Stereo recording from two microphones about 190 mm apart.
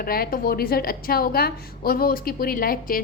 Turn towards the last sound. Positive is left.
turn(degrees=50)  # may be behind; listen again after turning